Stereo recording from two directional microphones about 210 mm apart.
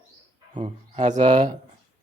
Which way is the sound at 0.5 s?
30° right (ahead or behind).